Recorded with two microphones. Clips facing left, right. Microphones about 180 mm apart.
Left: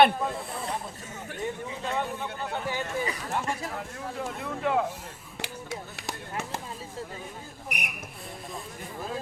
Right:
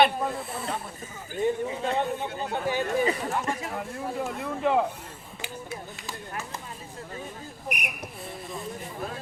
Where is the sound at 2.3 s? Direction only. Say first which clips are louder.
Right 4 dB; 25° right (ahead or behind).